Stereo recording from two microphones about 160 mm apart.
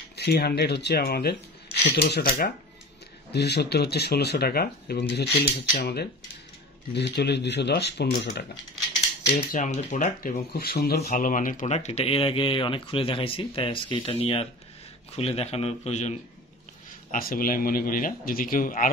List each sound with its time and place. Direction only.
0.1 s speech: 85° left; by 2.5 s 70° left (ahead or behind)
3.3 s speech: 90° left; by 6.0 s 70° left (ahead or behind)
6.9 s speech: 90° left
9.5 s speech: 55° left (ahead or behind); by 11.0 s 75° left (ahead or behind)
11.1 s speech: 60° left (ahead or behind); by 16.2 s 45° left (ahead or behind)
17.1 s speech: 65° left (ahead or behind)